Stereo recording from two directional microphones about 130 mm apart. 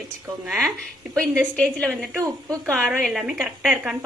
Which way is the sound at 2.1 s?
20° right (ahead or behind).